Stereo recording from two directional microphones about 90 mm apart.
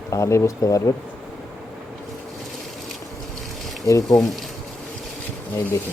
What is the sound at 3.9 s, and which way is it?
Speech, 40° left (ahead or behind).